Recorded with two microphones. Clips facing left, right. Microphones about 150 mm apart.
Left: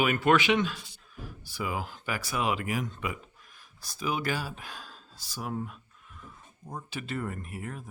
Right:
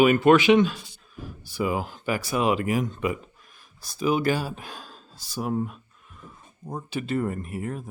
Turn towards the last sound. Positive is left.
turn(degrees=-35)  # may be behind; listen again after turning